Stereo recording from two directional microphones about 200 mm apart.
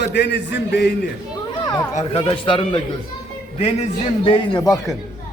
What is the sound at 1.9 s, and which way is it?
A man's voice, 25° left (ahead or behind).